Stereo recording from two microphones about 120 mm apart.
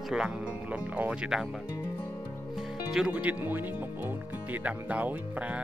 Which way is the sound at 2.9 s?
10° right (ahead or behind).